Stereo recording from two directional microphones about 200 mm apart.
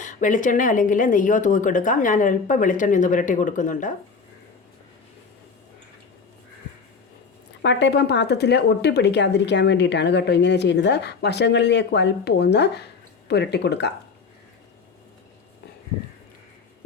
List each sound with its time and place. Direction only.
0.0 s speech: 40° left (ahead or behind)
7.6 s a woman's voice: 60° left (ahead or behind)